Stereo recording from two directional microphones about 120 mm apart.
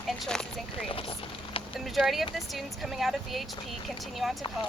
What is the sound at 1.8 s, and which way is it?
Speech, centre (ahead or behind).